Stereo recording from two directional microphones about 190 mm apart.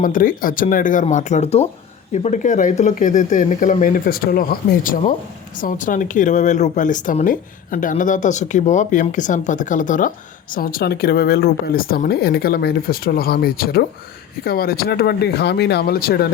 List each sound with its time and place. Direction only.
0.0 s speech: 45° left (ahead or behind)